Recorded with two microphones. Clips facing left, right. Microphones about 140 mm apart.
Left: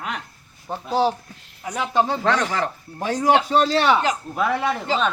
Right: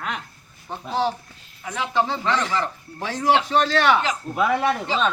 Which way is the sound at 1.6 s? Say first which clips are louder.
Left 2 dB; 45° left (ahead or behind).